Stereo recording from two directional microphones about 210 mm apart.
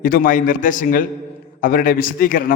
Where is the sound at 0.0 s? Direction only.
40° left (ahead or behind).